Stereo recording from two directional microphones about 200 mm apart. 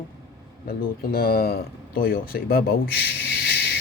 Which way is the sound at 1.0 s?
50° left (ahead or behind).